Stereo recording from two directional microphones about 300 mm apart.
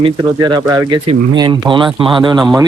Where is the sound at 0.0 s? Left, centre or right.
Centre.